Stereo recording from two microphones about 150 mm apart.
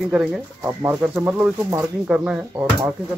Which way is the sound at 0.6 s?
15° right (ahead or behind).